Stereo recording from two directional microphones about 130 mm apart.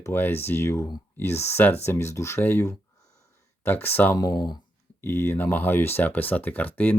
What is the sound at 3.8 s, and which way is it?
Speech, 15° left (ahead or behind).